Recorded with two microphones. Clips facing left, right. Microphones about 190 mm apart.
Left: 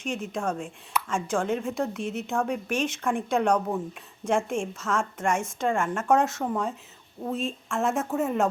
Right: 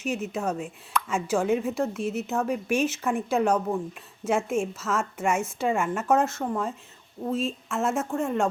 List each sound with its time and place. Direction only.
0.0 s speech: 5° right (ahead or behind)